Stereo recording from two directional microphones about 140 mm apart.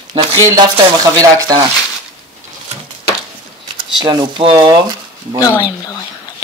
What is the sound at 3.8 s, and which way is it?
Speech, 30° right (ahead or behind).